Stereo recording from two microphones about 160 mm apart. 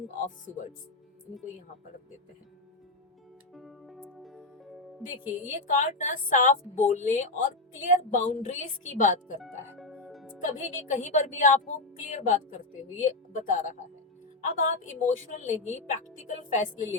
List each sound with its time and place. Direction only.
3.5 s music: centre (ahead or behind)
5.5 s speech: 50° left (ahead or behind)
9.7 s music: centre (ahead or behind)
10.7 s speech: 50° left (ahead or behind)